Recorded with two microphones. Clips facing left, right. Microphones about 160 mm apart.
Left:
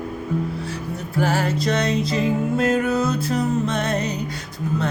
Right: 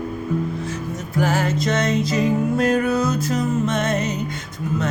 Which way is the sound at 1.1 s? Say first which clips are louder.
Right 1 dB; 30° left (ahead or behind).